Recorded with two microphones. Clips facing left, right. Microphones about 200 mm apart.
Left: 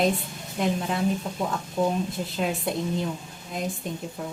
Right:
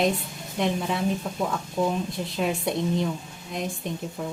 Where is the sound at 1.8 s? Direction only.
15° left (ahead or behind).